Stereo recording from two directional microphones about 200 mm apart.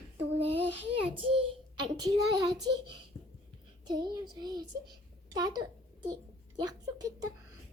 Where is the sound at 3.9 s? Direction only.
20° right (ahead or behind).